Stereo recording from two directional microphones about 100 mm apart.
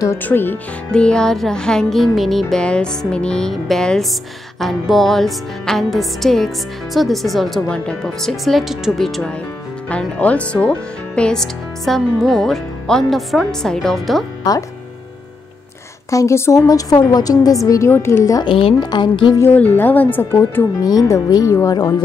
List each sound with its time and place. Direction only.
0.2 s speech: 20° left (ahead or behind)
0.9 s music: 10° left (ahead or behind)
14.5 s a woman's voice: 40° left (ahead or behind)
16.1 s a woman's voice: 30° left (ahead or behind)
17.6 s speech: 30° left (ahead or behind)
18.4 s speech: 60° left (ahead or behind)
18.8 s speech: 45° left (ahead or behind)
19.5 s speech: 15° left (ahead or behind)
20.8 s a woman's voice: 40° left (ahead or behind)